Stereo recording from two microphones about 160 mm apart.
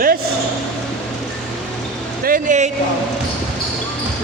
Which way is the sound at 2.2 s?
55° right (ahead or behind).